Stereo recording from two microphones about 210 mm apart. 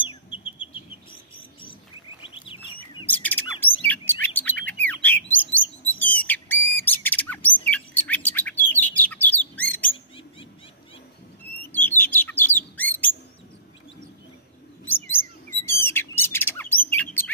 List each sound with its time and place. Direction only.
0.0 s bird: 25° left (ahead or behind)
2.4 s bird: 25° left (ahead or behind)
3.1 s a sound: 10° left (ahead or behind)
3.9 s chirp: 10° left (ahead or behind)
5.5 s bird: 10° left (ahead or behind)
5.9 s a sound: 10° left (ahead or behind)
6.8 s squawk: 10° left (ahead or behind)
7.7 s bird: 5° left (ahead or behind)
11.7 s bird: 10° left (ahead or behind)
15.0 s bird: 10° left (ahead or behind)